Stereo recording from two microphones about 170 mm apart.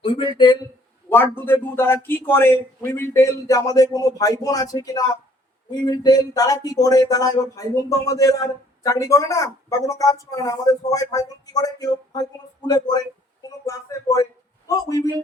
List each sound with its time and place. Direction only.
0.0 s speech: 30° left (ahead or behind)
1.1 s a man's voice: 15° left (ahead or behind)